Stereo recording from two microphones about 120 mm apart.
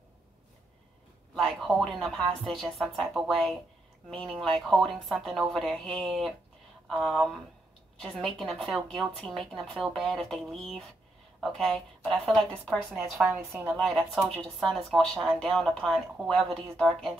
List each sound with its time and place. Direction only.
1.3 s a woman's voice: centre (ahead or behind)
13.5 s a woman's voice: 20° right (ahead or behind)
13.7 s a woman's voice: centre (ahead or behind)